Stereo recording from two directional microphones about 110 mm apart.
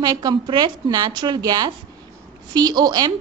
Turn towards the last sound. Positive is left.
turn(degrees=-40)  # may be behind; listen again after turning